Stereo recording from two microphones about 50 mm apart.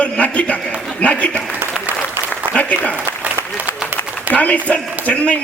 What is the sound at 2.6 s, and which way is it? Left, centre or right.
Speech, left.